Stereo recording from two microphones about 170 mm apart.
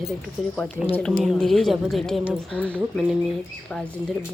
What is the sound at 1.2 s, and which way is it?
A woman's voice, centre (ahead or behind).